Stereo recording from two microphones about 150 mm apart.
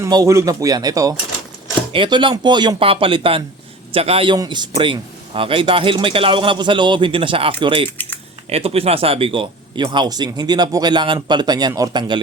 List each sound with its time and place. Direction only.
0.0 s speech: 20° right (ahead or behind)